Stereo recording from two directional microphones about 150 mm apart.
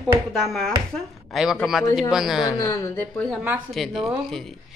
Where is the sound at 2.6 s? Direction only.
20° left (ahead or behind).